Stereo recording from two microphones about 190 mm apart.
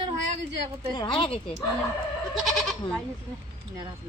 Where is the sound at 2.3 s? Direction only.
Centre (ahead or behind).